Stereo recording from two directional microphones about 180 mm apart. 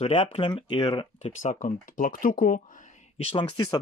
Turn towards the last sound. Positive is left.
turn(degrees=25)  # may be behind; listen again after turning